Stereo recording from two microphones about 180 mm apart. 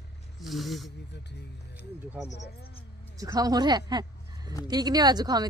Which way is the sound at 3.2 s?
20° right (ahead or behind).